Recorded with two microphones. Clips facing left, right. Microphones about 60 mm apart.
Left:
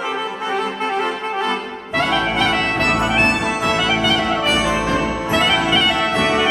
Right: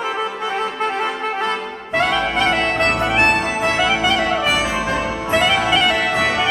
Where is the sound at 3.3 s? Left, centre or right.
Right.